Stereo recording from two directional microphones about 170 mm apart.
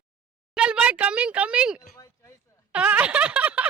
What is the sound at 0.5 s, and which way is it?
Speech, 5° right (ahead or behind).